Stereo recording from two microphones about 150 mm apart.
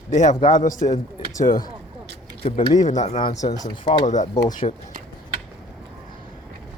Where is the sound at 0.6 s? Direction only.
55° left (ahead or behind).